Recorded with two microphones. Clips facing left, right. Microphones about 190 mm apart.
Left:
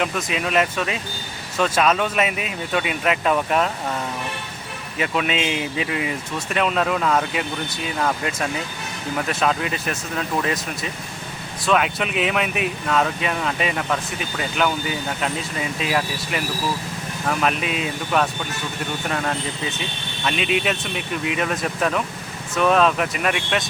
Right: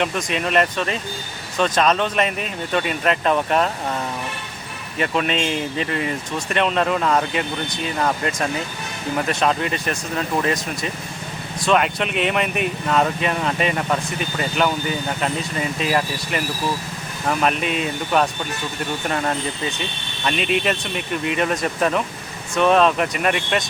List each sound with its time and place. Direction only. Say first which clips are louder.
0.0 s speech: right 1 dB; 5° left (ahead or behind)
4.9 s speech: right 1 dB; 5° left (ahead or behind)